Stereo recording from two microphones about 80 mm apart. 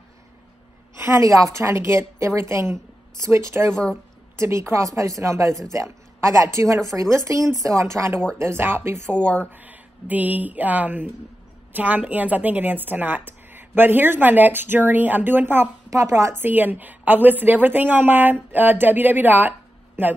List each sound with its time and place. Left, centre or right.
1.2 s a woman's voice: right
3.7 s speech: centre
4.4 s a woman's voice: right
15.9 s a woman's voice: right
16.3 s a woman's voice: right